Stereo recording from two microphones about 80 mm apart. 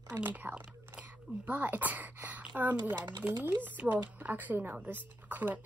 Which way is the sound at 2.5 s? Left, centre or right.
Right.